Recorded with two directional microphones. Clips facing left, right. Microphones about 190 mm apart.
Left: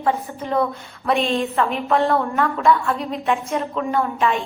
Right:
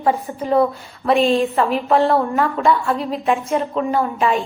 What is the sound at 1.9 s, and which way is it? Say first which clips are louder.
Speech: right 3 dB; centre (ahead or behind).